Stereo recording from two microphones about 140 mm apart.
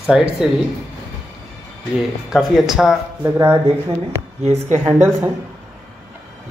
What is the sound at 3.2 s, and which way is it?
Speech, 15° right (ahead or behind).